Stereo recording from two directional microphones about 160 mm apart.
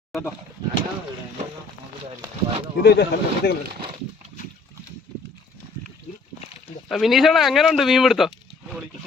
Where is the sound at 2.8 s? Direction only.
90° left.